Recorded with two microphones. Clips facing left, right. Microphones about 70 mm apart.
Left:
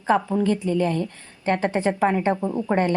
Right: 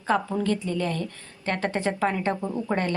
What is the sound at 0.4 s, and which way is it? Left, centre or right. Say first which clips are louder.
A woman's voice: left 5 dB; left.